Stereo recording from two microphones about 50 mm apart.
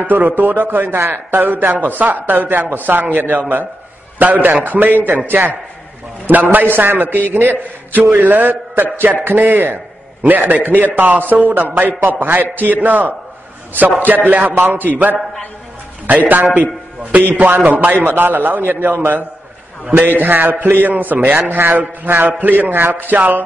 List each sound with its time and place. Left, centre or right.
0.0 s speech: right
17.4 s speech: right
20.2 s mantra: right
20.6 s speech: right
23.1 s speech: right